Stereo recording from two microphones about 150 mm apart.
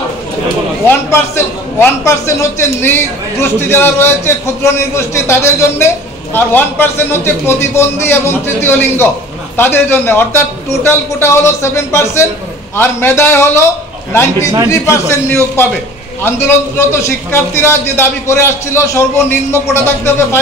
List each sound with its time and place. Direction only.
0.8 s a man's voice: 15° left (ahead or behind)